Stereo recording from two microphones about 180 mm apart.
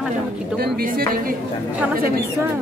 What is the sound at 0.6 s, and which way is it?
Speech, 50° right (ahead or behind).